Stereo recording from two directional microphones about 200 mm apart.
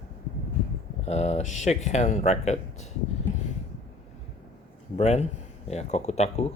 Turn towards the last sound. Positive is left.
turn(degrees=35)  # may be behind; listen again after turning